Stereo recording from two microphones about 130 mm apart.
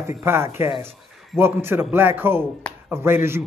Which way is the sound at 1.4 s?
20° right (ahead or behind).